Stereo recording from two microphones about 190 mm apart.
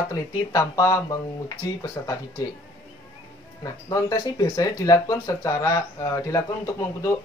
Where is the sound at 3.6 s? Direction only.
20° left (ahead or behind).